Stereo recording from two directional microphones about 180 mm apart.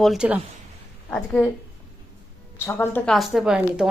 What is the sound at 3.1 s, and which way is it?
Speech, centre (ahead or behind).